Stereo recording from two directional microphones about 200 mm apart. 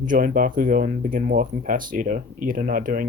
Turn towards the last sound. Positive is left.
turn(degrees=-45)  # may be behind; listen again after turning